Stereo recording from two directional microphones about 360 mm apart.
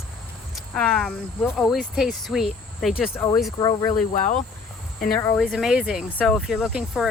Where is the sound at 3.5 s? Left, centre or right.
Centre.